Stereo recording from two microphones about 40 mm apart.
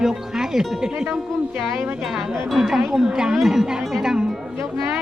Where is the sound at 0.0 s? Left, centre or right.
Centre.